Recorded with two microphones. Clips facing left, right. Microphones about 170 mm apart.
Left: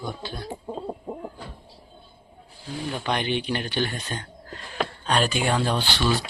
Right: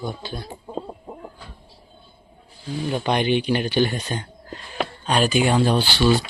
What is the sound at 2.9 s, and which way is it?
Speech, 20° right (ahead or behind).